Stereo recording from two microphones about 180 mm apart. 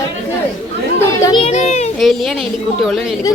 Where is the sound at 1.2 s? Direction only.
25° left (ahead or behind).